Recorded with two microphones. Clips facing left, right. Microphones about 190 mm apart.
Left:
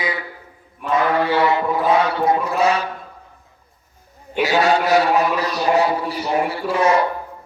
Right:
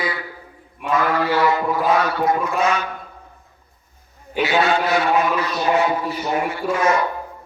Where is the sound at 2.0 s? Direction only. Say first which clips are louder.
Left 1 dB; 25° left (ahead or behind).